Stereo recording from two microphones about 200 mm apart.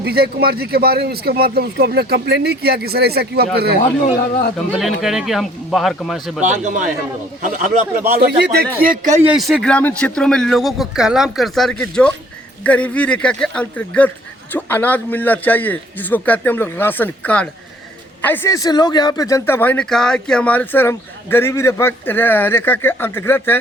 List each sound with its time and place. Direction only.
0.0 s speech: 50° right (ahead or behind)
4.7 s speech: centre (ahead or behind)
6.4 s speech: 35° right (ahead or behind)
9.3 s a man's voice: centre (ahead or behind)